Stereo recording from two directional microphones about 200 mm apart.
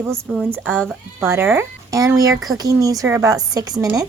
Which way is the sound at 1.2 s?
10° right (ahead or behind).